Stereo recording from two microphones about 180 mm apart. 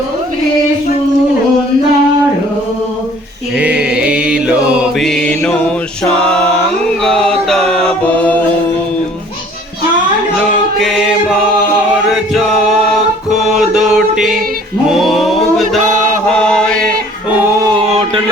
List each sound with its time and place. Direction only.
3.6 s mantra: 5° right (ahead or behind)
7.0 s chant: 5° left (ahead or behind)
10.8 s music: centre (ahead or behind)
16.3 s chant: 5° left (ahead or behind)
17.6 s music: 20° right (ahead or behind)
17.8 s chant: 35° right (ahead or behind)